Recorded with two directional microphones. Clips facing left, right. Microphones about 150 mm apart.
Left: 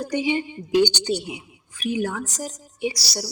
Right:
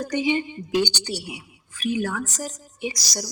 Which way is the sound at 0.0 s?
10° left (ahead or behind).